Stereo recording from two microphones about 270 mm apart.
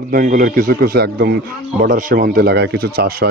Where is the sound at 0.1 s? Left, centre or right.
Right.